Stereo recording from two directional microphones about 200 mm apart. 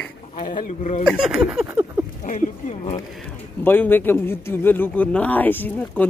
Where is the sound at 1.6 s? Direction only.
10° right (ahead or behind).